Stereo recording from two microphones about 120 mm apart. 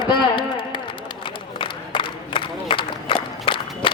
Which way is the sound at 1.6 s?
45° left (ahead or behind).